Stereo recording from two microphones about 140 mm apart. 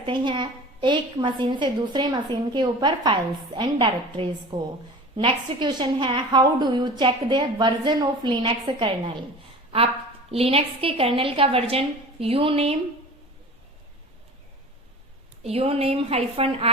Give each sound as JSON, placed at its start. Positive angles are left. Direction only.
{"t": 0.0, "sound": "a woman's voice", "side_deg": -35}
{"t": 15.4, "sound": "a woman's voice", "side_deg": -45}